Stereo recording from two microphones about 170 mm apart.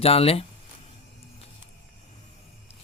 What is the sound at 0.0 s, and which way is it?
Speech, 35° left (ahead or behind).